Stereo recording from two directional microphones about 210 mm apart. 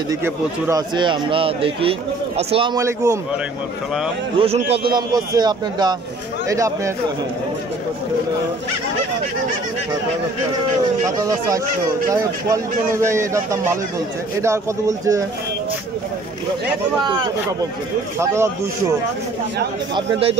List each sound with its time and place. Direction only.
0.1 s speech: 15° right (ahead or behind)
4.4 s speech: 30° right (ahead or behind)
11.1 s speech: 15° right (ahead or behind)
18.2 s speech: 15° right (ahead or behind)
19.9 s speech: 25° right (ahead or behind)